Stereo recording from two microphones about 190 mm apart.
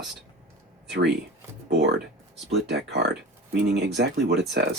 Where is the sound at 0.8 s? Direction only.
60° right (ahead or behind).